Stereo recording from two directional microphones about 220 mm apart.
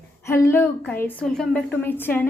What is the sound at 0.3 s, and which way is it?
A woman's voice, 10° left (ahead or behind).